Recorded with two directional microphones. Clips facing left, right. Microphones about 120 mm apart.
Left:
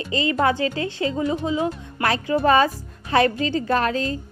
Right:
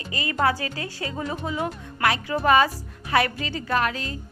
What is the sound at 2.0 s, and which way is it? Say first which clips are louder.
A woman's voice: left 3 dB; 35° left (ahead or behind).